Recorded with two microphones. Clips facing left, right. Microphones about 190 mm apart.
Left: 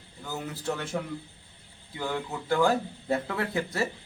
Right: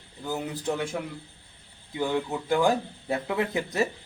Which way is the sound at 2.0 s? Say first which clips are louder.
Right 5 dB; 15° right (ahead or behind).